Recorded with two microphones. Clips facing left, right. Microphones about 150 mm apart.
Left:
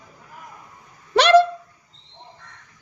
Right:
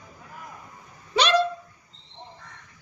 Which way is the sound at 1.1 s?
75° left (ahead or behind).